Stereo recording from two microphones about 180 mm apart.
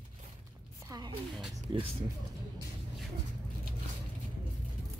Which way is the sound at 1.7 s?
25° right (ahead or behind).